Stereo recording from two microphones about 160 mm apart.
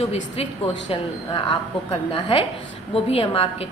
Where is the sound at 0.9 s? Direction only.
35° left (ahead or behind).